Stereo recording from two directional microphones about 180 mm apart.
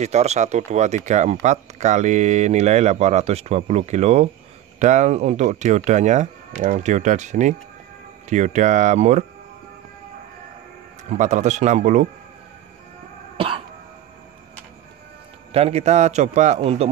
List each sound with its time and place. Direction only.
0.0 s speech: 35° right (ahead or behind)
11.1 s speech: 40° right (ahead or behind)
15.5 s speech: 35° right (ahead or behind)